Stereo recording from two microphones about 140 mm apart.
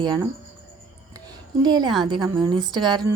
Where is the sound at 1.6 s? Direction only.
30° right (ahead or behind).